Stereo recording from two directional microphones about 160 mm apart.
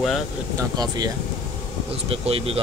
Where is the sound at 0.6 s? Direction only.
25° right (ahead or behind).